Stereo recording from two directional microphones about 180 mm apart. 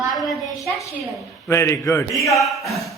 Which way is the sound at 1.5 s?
15° left (ahead or behind).